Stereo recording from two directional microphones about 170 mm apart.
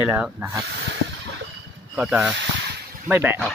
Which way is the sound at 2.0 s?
5° right (ahead or behind).